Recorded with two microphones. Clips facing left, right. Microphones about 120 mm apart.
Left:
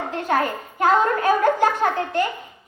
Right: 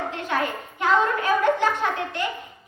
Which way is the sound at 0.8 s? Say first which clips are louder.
Left 3 dB; 40° left (ahead or behind).